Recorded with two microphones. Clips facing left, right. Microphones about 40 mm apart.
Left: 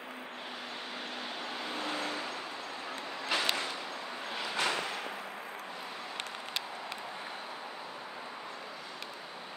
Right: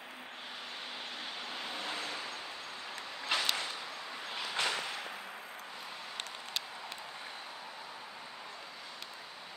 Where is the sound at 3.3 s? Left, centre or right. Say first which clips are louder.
Left 2 dB; left.